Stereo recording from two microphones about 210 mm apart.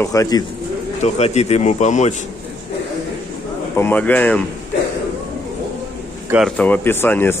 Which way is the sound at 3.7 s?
10° left (ahead or behind).